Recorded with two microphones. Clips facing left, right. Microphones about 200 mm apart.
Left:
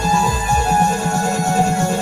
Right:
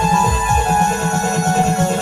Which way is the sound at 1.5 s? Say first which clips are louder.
Right 1 dB; 20° right (ahead or behind).